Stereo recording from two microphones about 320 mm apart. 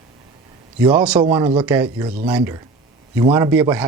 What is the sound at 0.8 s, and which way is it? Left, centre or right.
Speech, centre.